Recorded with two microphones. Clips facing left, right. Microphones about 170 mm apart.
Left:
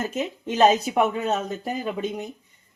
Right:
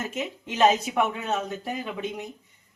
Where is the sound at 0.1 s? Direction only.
40° left (ahead or behind).